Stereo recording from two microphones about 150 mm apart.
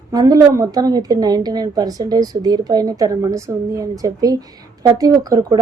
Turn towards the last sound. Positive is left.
turn(degrees=-25)  # may be behind; listen again after turning